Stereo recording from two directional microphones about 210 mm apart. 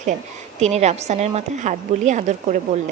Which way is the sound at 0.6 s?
30° right (ahead or behind).